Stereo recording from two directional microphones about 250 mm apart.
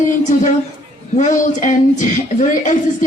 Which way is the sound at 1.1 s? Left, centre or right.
Left.